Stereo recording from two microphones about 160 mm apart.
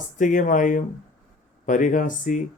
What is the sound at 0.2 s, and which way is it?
Speech, 55° left (ahead or behind).